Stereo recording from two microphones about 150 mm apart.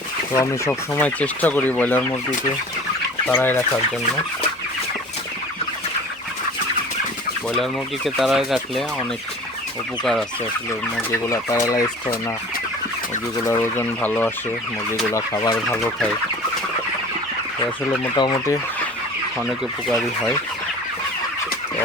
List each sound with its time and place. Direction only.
0.3 s speech: 15° left (ahead or behind)
3.2 s speech: 10° left (ahead or behind)
7.6 s fowl: centre (ahead or behind)
10.0 s fowl: centre (ahead or behind)
11.6 s fowl: 20° left (ahead or behind)
13.4 s speech: 20° left (ahead or behind)
15.1 s fowl: 20° left (ahead or behind)
18.1 s fowl: 30° left (ahead or behind)
19.4 s fowl: centre (ahead or behind)